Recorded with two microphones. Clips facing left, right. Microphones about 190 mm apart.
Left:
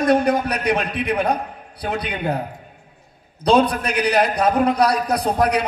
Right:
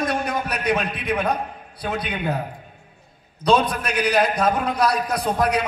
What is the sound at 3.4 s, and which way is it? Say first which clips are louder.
A man's voice: left 3 dB; 35° left (ahead or behind).